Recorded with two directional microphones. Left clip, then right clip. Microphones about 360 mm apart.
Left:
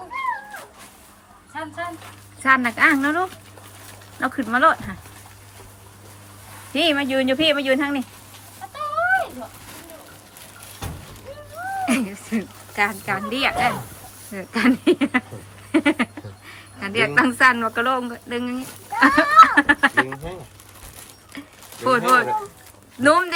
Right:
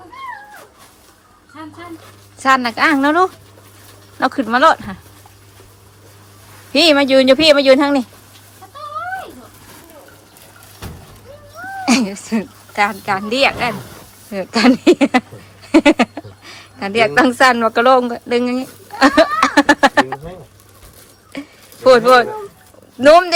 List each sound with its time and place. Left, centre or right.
2.4 s speech: centre
6.7 s speech: centre
11.9 s speech: centre
15.7 s a sound: centre
21.8 s speech: centre